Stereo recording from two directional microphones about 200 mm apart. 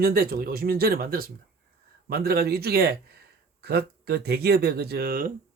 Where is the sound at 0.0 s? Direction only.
45° right (ahead or behind).